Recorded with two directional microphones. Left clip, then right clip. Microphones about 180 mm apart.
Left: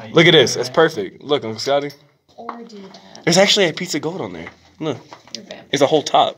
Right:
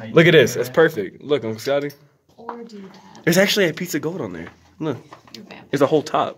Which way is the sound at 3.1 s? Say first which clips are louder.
Left 3 dB; 25° right (ahead or behind).